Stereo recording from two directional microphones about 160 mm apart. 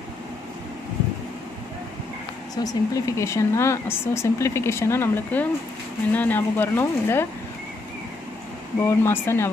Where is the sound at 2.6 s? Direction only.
20° left (ahead or behind).